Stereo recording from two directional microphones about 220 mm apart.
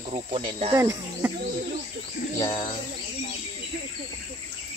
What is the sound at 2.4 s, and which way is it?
Bird, 20° left (ahead or behind).